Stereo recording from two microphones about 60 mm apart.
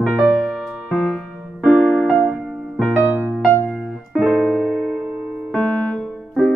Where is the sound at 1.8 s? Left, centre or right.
Centre.